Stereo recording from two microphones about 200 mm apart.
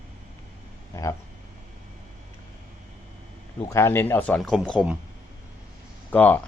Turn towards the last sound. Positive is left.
turn(degrees=10)  # may be behind; listen again after turning